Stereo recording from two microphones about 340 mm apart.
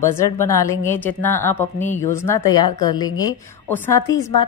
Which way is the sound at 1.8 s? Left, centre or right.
Left.